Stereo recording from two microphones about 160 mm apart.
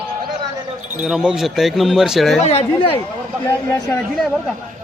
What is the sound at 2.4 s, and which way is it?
Speech, 40° left (ahead or behind).